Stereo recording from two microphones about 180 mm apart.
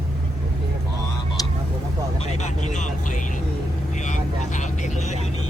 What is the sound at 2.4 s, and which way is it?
Vehicle, 40° left (ahead or behind).